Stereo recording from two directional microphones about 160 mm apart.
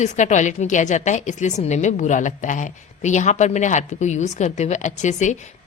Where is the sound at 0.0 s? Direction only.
50° left (ahead or behind).